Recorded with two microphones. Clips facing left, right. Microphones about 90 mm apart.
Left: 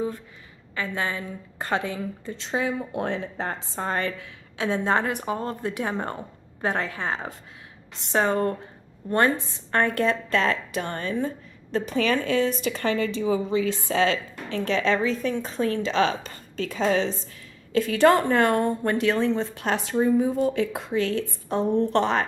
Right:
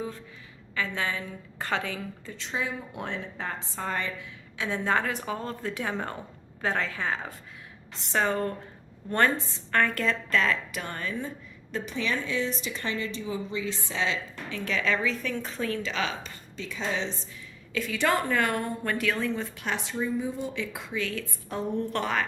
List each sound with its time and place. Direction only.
0.8 s a woman's voice: 35° left (ahead or behind)
1.5 s a woman's voice: 20° left (ahead or behind)
2.3 s a woman's voice: 35° left (ahead or behind)
4.8 s a woman's voice: 25° left (ahead or behind)
11.9 s a woman's voice: 65° left (ahead or behind)
14.6 s a woman's voice: 35° left (ahead or behind)
19.9 s a woman's voice: 60° left (ahead or behind); by 22.3 s 30° left (ahead or behind)